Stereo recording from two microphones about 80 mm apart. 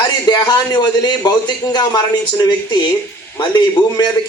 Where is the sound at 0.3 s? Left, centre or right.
Left.